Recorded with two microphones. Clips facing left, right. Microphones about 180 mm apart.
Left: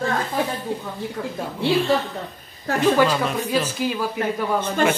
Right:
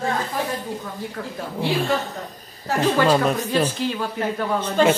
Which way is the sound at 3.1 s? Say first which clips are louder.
Right 4 dB; 40° right (ahead or behind).